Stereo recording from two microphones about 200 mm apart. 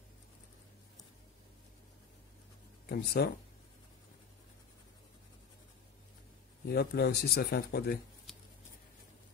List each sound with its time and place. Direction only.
2.9 s speech: 50° left (ahead or behind)
6.7 s speech: 50° left (ahead or behind)